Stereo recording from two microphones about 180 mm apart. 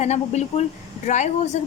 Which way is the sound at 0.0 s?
40° left (ahead or behind).